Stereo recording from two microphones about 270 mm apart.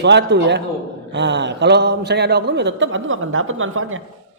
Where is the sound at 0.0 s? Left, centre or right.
Right.